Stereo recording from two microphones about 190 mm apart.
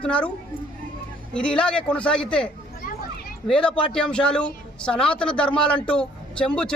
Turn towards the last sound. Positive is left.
turn(degrees=5)  # may be behind; listen again after turning